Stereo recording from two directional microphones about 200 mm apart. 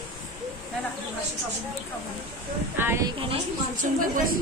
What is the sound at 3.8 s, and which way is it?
Speech, 40° right (ahead or behind).